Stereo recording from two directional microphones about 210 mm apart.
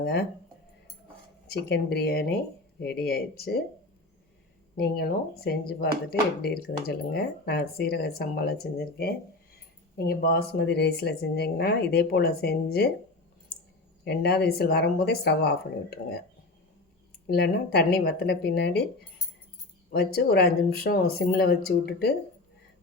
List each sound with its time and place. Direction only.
0.0 s speech: 50° left (ahead or behind)
1.5 s speech: 50° left (ahead or behind)
4.8 s speech: 45° left (ahead or behind)
14.0 s speech: 50° left (ahead or behind)
17.2 s speech: 50° left (ahead or behind)
19.9 s speech: 50° left (ahead or behind)